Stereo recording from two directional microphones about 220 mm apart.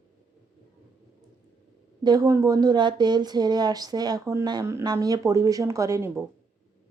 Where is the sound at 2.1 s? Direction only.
15° right (ahead or behind).